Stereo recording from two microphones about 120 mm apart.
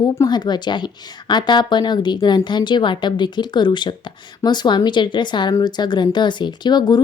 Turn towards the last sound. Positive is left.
turn(degrees=35)  # may be behind; listen again after turning